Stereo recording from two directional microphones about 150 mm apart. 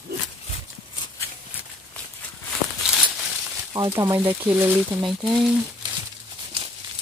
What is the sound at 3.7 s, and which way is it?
Speech, 20° right (ahead or behind).